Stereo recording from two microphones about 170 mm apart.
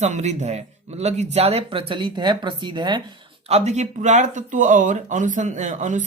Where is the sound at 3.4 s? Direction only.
40° right (ahead or behind).